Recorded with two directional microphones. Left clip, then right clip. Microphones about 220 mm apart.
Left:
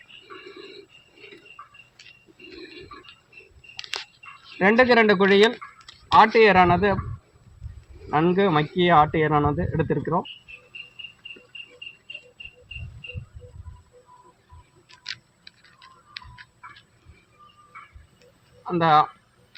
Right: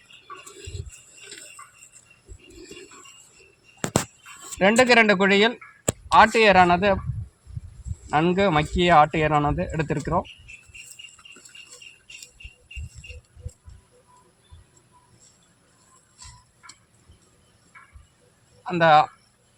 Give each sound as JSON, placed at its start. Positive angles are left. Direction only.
{"t": 4.5, "sound": "speech", "side_deg": -15}
{"t": 8.1, "sound": "speech", "side_deg": -10}
{"t": 18.6, "sound": "a man's voice", "side_deg": -20}